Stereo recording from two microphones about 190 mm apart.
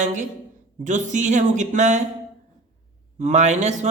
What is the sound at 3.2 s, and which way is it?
Speech, 35° right (ahead or behind).